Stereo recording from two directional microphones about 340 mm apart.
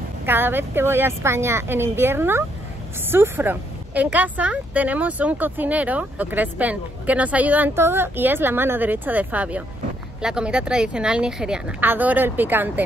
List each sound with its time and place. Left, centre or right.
0.2 s speech: centre